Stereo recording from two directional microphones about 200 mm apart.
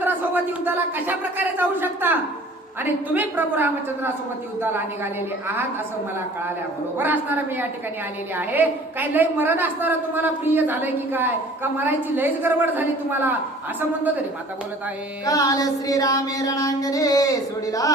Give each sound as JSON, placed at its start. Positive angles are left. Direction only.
{"t": 0.0, "sound": "a woman's voice", "side_deg": -10}
{"t": 6.9, "sound": "a woman's voice", "side_deg": -10}
{"t": 15.3, "sound": "music", "side_deg": 15}